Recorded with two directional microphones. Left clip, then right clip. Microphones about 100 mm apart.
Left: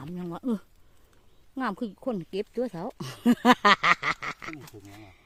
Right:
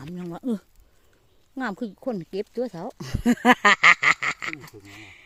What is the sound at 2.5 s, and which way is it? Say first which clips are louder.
Speech: right 2 dB; 10° right (ahead or behind).